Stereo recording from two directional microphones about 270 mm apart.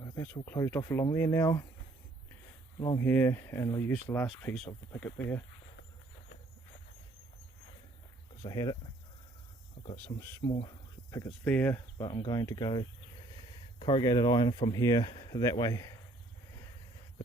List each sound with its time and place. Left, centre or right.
0.0 s speech: centre
2.8 s speech: centre
8.4 s speech: centre
9.8 s cricket: centre
10.4 s speech: left